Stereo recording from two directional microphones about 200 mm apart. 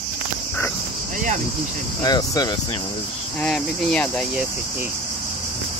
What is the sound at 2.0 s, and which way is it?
Speech, 20° left (ahead or behind).